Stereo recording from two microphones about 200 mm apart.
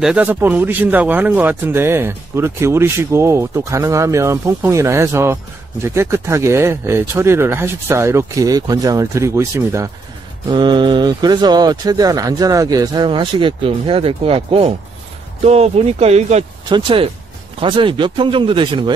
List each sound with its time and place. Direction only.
0.0 s a man's voice: 5° right (ahead or behind); by 18.9 s 25° right (ahead or behind)